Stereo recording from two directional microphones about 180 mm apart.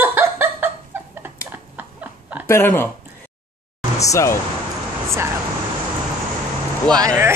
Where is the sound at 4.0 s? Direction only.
15° left (ahead or behind).